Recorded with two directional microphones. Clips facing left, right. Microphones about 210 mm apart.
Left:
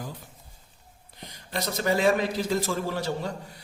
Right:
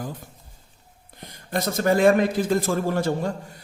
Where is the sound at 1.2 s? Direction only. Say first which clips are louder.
Right 5 dB; 50° right (ahead or behind).